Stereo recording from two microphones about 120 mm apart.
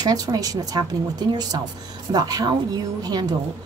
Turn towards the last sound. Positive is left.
turn(degrees=-35)  # may be behind; listen again after turning